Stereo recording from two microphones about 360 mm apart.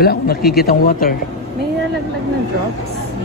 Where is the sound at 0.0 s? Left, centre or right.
Left.